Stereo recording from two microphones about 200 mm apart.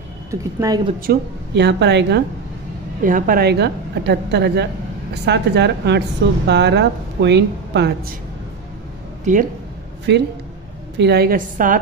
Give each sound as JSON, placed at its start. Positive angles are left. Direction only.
{"t": 0.3, "sound": "speech", "side_deg": -15}
{"t": 1.0, "sound": "a woman's voice", "side_deg": -60}
{"t": 3.0, "sound": "a woman's voice", "side_deg": -40}
{"t": 9.2, "sound": "speech", "side_deg": -40}
{"t": 11.0, "sound": "a woman's voice", "side_deg": -55}